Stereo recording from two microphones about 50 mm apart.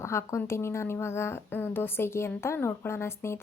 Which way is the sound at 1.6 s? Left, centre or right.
Left.